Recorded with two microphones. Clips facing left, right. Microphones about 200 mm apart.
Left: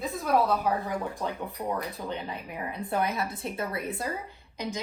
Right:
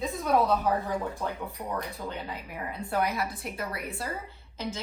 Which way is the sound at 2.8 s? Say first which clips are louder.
Even; 20° left (ahead or behind).